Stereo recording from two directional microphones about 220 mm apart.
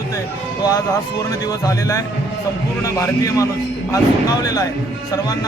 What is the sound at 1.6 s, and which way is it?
Speech, 15° left (ahead or behind).